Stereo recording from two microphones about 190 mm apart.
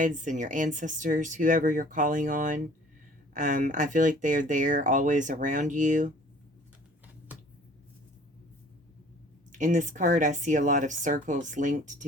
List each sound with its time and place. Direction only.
0.0 s speech: 40° right (ahead or behind)
9.5 s speech: 40° right (ahead or behind)